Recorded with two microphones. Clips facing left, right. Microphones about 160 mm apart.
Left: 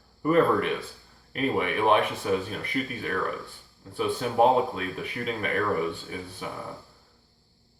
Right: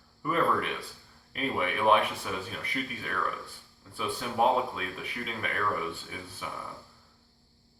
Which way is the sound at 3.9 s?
40° left (ahead or behind).